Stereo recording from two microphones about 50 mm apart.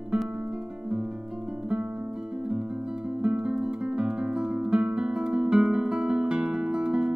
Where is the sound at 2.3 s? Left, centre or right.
Right.